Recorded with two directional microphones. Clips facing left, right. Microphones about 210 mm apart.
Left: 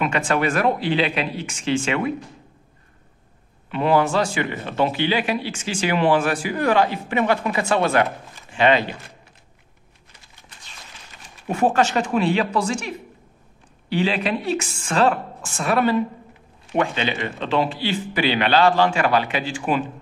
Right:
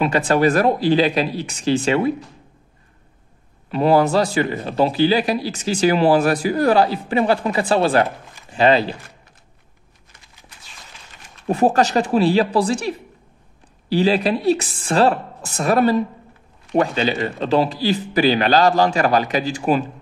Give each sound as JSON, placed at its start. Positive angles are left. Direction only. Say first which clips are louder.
{"t": 0.0, "sound": "speech", "louder": "right 5 dB", "side_deg": -35}
{"t": 3.7, "sound": "speech", "louder": "right 3 dB", "side_deg": -35}
{"t": 11.4, "sound": "speech", "louder": "right 3 dB", "side_deg": -35}